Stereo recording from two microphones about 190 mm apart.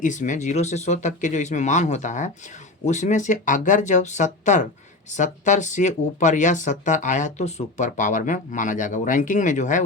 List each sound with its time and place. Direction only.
0.0 s speech: 40° left (ahead or behind)